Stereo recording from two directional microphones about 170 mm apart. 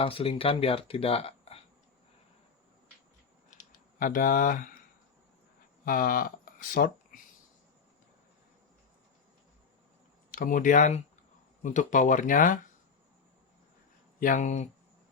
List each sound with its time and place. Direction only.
0.0 s speech: 35° left (ahead or behind)
3.5 s typing: 50° left (ahead or behind)
5.8 s speech: 55° left (ahead or behind)
10.3 s speech: 55° left (ahead or behind)
14.2 s speech: 50° left (ahead or behind)